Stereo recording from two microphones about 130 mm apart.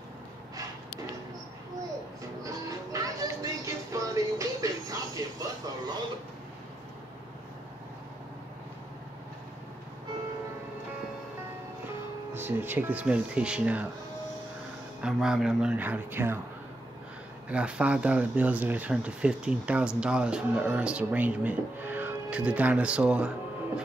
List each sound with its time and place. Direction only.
2.4 s music: 25° right (ahead or behind)
12.4 s speech: 15° right (ahead or behind)
15.0 s speech: 5° right (ahead or behind)
17.5 s speech: 10° right (ahead or behind)